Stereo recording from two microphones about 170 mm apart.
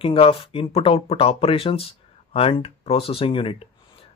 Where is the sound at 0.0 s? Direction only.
30° left (ahead or behind).